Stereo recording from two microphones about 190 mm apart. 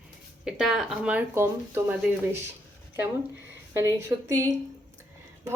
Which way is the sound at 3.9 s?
15° right (ahead or behind).